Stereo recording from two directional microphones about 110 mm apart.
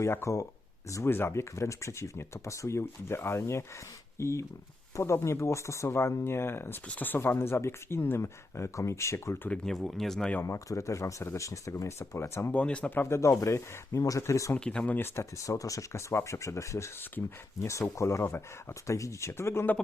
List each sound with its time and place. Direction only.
0.0 s speech: 25° left (ahead or behind)
9.5 s speech: 5° left (ahead or behind)
10.4 s speech: 30° left (ahead or behind)
12.5 s speech: 10° left (ahead or behind); by 14.5 s 30° left (ahead or behind)
14.5 s speech: 10° left (ahead or behind)